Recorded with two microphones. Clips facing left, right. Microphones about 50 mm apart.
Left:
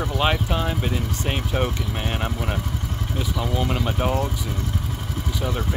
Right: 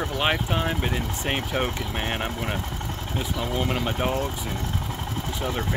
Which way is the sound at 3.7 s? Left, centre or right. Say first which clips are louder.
Left 1 dB; centre.